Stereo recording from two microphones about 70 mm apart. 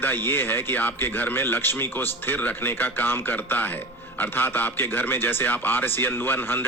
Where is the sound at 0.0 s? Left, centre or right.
Left.